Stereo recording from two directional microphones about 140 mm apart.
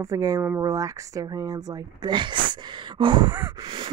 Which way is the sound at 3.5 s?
35° right (ahead or behind).